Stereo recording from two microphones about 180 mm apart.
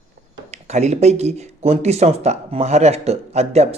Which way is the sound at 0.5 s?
40° right (ahead or behind).